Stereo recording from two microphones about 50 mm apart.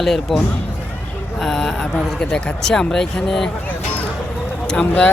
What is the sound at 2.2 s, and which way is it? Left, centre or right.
Speech, left.